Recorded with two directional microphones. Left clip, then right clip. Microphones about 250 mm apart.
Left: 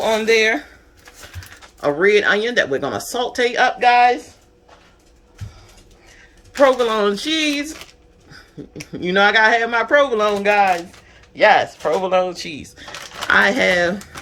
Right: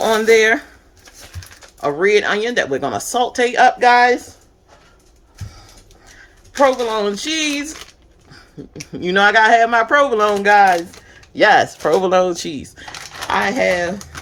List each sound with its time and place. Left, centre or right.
0.3 s speech: centre
1.8 s speech: centre
6.6 s speech: centre
8.9 s speech: centre
11.4 s speech: right
13.3 s speech: centre